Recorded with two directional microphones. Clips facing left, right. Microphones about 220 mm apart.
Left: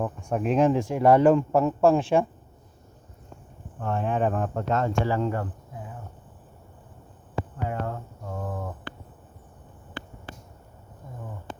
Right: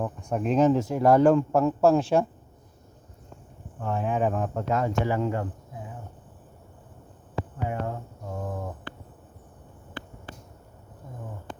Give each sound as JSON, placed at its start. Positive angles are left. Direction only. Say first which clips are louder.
{"t": 0.2, "sound": "speech", "louder": "even", "side_deg": 5}
{"t": 3.8, "sound": "speech", "louder": "left 1 dB", "side_deg": -5}
{"t": 7.7, "sound": "a sound", "louder": "even", "side_deg": -15}